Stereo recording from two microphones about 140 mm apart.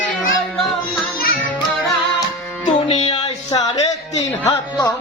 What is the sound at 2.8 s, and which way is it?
Music, 40° left (ahead or behind).